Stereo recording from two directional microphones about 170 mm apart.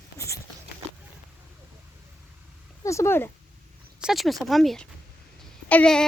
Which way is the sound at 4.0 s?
Centre (ahead or behind).